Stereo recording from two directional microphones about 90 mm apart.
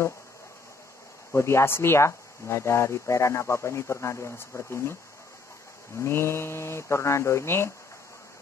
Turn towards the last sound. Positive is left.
turn(degrees=30)  # may be behind; listen again after turning